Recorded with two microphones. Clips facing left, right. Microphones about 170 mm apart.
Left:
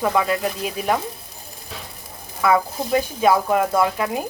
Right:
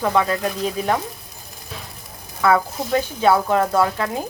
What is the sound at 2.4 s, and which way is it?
Speech, 15° left (ahead or behind).